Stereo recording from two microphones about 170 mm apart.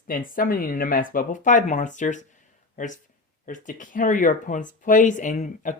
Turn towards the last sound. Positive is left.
turn(degrees=45)  # may be behind; listen again after turning